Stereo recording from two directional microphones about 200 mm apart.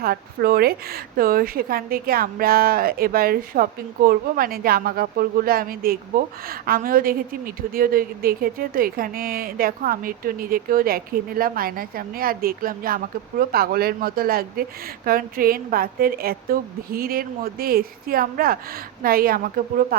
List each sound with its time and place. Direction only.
0.0 s a woman's voice: 50° right (ahead or behind)